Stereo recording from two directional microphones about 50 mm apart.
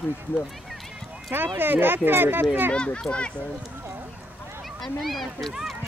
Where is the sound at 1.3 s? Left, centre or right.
Right.